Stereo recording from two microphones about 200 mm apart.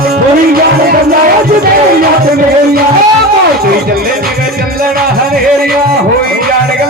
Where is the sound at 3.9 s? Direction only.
50° right (ahead or behind).